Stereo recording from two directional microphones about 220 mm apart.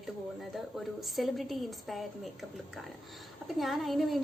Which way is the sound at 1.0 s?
Centre (ahead or behind).